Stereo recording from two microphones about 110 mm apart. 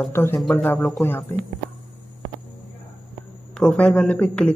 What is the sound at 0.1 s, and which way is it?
Speech, 20° left (ahead or behind).